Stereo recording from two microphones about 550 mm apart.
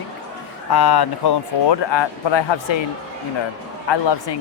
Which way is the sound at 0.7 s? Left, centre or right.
Left.